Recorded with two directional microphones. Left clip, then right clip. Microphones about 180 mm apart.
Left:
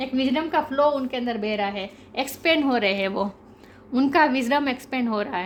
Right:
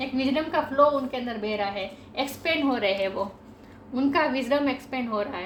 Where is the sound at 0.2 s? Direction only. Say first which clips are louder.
Left 2 dB; 60° left (ahead or behind).